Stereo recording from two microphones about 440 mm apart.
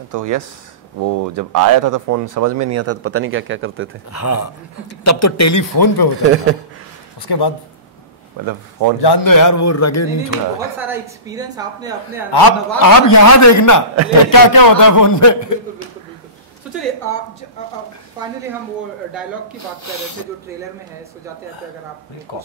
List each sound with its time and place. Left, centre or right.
0.1 s speech: right
4.1 s a man's voice: left
7.2 s speech: left
8.5 s speech: right
9.0 s speech: left
10.8 s a woman's voice: centre
12.3 s a man's voice: left
19.6 s a man's voice: left
22.3 s speech: left